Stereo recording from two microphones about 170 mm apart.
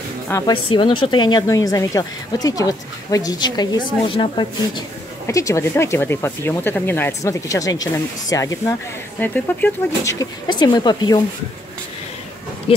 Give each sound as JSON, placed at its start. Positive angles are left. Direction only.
{"t": 0.5, "sound": "a woman's voice", "side_deg": 30}
{"t": 5.2, "sound": "a woman's voice", "side_deg": 15}
{"t": 12.7, "sound": "speech", "side_deg": 35}